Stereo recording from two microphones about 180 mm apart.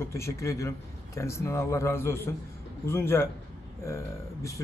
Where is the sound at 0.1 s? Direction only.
15° left (ahead or behind).